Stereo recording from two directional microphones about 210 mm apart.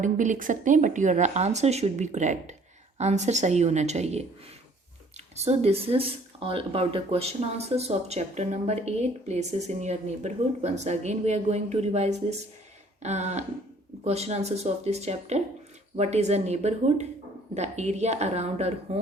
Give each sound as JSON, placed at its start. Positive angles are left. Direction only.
{"t": 0.0, "sound": "speech", "side_deg": -35}